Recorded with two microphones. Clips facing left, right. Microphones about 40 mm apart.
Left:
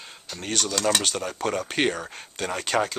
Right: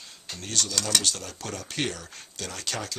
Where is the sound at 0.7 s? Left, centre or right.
Centre.